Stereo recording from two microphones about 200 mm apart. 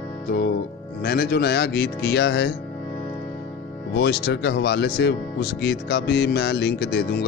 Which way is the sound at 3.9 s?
55° left (ahead or behind).